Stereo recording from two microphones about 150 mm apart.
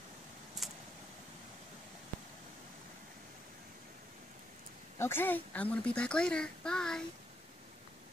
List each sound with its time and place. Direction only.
0.6 s vehicle: centre (ahead or behind)
4.9 s a child's voice: 15° left (ahead or behind)